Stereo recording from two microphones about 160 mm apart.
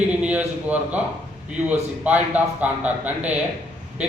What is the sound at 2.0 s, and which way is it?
A man's voice, 10° right (ahead or behind).